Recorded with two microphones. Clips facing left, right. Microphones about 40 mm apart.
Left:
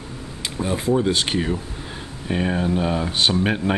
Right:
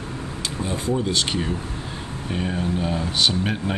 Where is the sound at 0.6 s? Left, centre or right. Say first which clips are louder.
Left 5 dB; centre.